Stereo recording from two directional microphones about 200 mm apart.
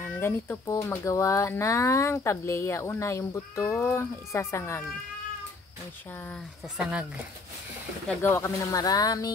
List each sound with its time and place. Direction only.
0.2 s speech: 15° left (ahead or behind)
8.1 s speech: 15° left (ahead or behind)